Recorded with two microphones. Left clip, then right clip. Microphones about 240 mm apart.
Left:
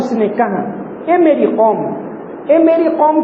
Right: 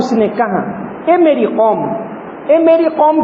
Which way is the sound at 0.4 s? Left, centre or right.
Right.